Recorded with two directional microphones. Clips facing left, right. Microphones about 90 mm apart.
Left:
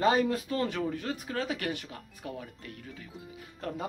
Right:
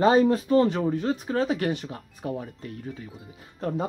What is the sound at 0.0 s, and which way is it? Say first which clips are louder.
Speech: right 7 dB; 30° right (ahead or behind).